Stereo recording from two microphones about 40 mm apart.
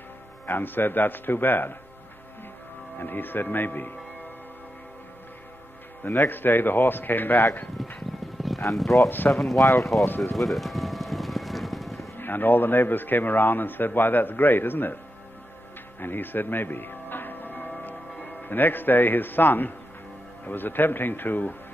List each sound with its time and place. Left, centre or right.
0.5 s a man's voice: left
3.0 s a man's voice: left
6.0 s a man's voice: left
8.4 s music: centre
9.4 s speech: centre
10.3 s music: centre
12.2 s a man's voice: left
16.0 s music: left
17.8 s a man's voice: left